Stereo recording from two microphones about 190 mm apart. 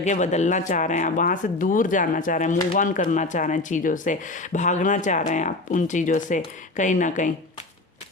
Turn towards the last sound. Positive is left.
turn(degrees=40)  # may be behind; listen again after turning